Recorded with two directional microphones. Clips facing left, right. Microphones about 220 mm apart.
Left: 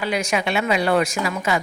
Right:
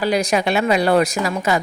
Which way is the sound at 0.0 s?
35° right (ahead or behind).